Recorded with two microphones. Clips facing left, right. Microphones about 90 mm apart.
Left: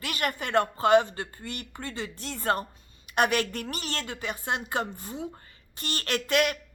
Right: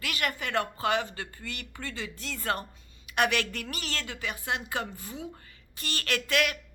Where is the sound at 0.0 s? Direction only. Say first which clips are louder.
Left 2 dB; 35° left (ahead or behind).